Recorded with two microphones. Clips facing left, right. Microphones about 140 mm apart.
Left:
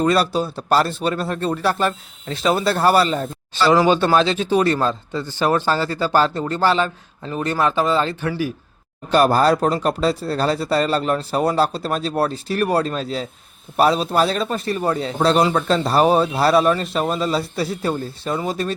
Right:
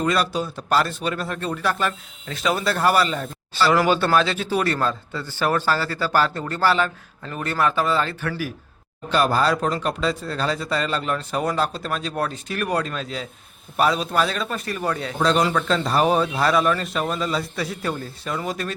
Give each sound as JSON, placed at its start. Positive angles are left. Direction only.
{"t": 0.0, "sound": "speech", "side_deg": 35}
{"t": 9.0, "sound": "a man's voice", "side_deg": 40}